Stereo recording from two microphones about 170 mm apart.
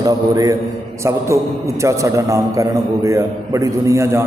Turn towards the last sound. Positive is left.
turn(degrees=-15)  # may be behind; listen again after turning